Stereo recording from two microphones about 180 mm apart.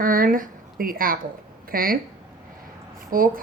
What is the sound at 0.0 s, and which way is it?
Speech, 50° right (ahead or behind).